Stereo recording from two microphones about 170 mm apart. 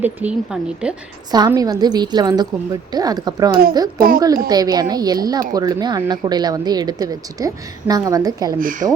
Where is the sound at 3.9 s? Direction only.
60° right (ahead or behind).